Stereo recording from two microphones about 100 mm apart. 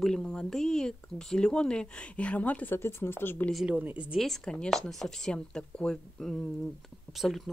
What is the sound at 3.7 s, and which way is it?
Speech, 15° right (ahead or behind).